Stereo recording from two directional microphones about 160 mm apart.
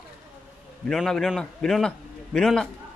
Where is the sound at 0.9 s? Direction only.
5° left (ahead or behind).